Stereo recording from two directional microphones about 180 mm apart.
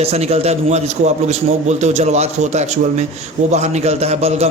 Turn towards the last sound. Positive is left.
turn(degrees=-35)  # may be behind; listen again after turning